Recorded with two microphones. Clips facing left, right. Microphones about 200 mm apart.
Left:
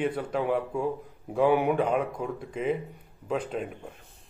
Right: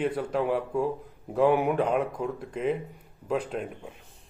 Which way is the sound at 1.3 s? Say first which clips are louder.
Even; 5° left (ahead or behind).